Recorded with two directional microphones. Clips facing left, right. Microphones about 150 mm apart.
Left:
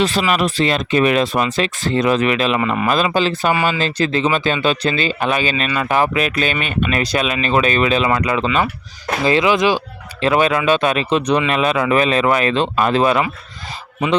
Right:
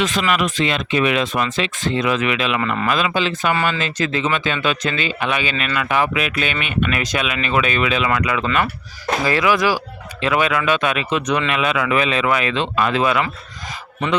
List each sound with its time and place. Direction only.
0.0 s speech: 35° left (ahead or behind)
2.6 s speech: 20° left (ahead or behind)
2.8 s speech: 35° left (ahead or behind)
10.2 s speech: 35° left (ahead or behind)